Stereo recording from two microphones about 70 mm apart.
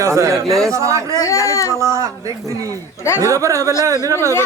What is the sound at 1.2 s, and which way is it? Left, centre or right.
Speech, left.